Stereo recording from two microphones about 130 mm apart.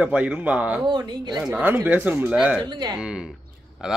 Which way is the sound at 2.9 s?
5° right (ahead or behind).